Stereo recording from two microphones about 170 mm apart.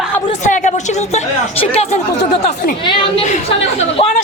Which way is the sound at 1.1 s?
40° left (ahead or behind).